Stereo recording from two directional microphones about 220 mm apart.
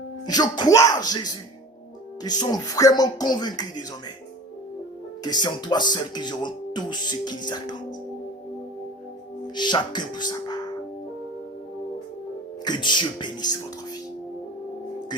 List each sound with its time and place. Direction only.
0.3 s speech: 20° left (ahead or behind)
5.2 s speech: 20° left (ahead or behind)
9.6 s speech: 20° left (ahead or behind)
12.6 s speech: 20° left (ahead or behind)